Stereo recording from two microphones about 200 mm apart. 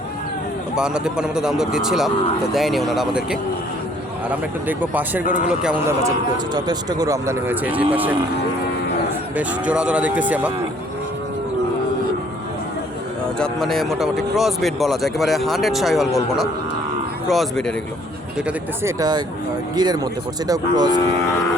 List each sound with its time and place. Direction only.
0.8 s speech: 5° right (ahead or behind)
4.8 s speech: 10° right (ahead or behind)
6.5 s speech: 20° right (ahead or behind)
9.4 s speech: 5° right (ahead or behind)
13.4 s speech: centre (ahead or behind)
18.4 s speech: 15° right (ahead or behind)